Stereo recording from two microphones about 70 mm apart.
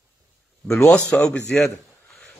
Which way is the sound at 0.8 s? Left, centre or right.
Centre.